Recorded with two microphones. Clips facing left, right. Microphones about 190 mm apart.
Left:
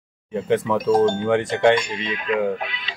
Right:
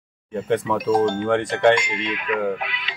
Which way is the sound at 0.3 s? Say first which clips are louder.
Left 1 dB; centre (ahead or behind).